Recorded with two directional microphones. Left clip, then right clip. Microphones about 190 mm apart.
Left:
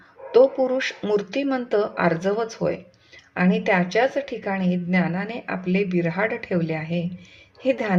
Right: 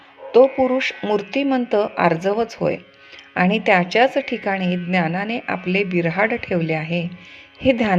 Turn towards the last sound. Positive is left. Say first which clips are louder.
# right 5 dB
turn(degrees=-15)  # may be behind; listen again after turning